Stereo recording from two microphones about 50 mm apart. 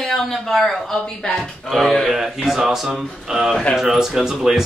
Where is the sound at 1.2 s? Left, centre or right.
Left.